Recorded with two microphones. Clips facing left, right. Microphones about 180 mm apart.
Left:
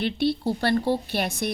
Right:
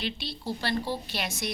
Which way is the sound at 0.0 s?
55° left (ahead or behind).